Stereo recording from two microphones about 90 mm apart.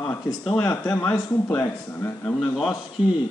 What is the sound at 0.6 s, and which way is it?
Speech, 40° left (ahead or behind).